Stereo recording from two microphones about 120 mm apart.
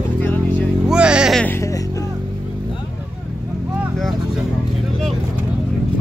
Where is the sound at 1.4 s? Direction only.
20° left (ahead or behind).